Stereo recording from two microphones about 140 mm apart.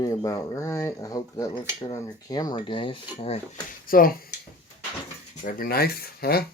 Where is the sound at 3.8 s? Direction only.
90° left.